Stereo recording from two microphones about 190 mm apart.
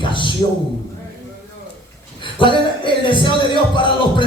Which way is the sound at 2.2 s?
25° left (ahead or behind).